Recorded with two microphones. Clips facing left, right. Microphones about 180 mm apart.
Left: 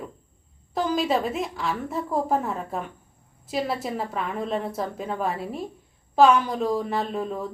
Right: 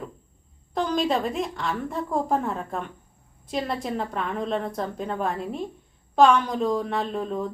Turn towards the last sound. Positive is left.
turn(degrees=5)  # may be behind; listen again after turning